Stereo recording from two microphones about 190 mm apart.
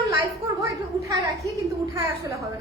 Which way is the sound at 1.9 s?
15° right (ahead or behind).